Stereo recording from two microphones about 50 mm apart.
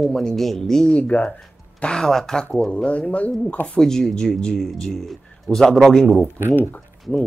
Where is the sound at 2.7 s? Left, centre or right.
Left.